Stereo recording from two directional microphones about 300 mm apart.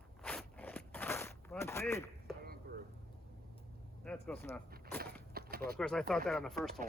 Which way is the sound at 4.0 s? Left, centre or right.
Centre.